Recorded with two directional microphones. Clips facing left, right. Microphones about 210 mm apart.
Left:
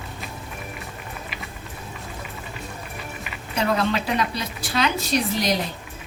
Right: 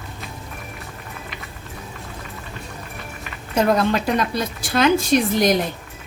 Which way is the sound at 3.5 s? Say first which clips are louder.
Right 5 dB; 45° right (ahead or behind).